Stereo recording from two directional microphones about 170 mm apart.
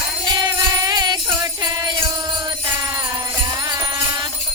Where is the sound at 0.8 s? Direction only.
25° right (ahead or behind).